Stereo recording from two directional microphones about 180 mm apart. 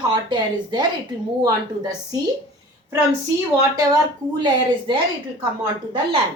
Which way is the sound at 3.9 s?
25° right (ahead or behind).